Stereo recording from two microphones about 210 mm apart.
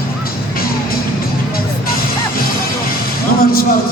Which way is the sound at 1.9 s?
45° left (ahead or behind).